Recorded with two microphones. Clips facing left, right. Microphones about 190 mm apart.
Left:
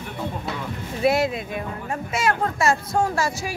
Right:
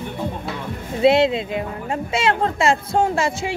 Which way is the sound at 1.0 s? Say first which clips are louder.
Right 5 dB; 25° right (ahead or behind).